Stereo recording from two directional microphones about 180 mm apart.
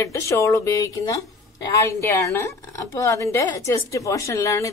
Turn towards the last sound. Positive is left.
turn(degrees=15)  # may be behind; listen again after turning